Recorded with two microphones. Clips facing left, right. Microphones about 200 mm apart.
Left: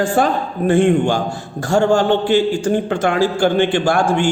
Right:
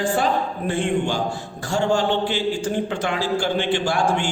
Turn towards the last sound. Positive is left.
turn(degrees=50)  # may be behind; listen again after turning